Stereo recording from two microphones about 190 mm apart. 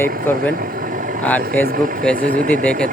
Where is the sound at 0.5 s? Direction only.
50° right (ahead or behind).